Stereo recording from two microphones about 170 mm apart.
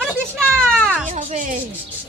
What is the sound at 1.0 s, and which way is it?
Speech, 45° right (ahead or behind).